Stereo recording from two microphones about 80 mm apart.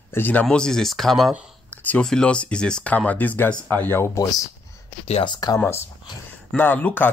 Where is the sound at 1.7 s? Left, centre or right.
Left.